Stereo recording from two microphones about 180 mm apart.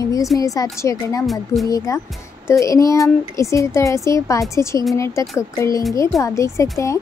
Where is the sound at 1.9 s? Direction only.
20° left (ahead or behind).